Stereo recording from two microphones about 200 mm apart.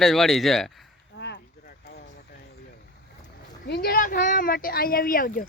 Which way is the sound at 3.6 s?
50° left (ahead or behind).